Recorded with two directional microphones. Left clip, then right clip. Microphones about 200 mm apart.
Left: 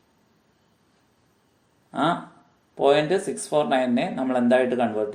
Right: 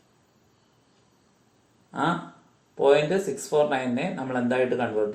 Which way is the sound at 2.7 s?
50° left (ahead or behind).